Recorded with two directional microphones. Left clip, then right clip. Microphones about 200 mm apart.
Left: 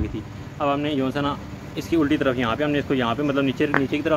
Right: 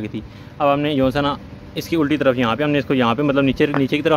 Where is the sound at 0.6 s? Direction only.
55° right (ahead or behind).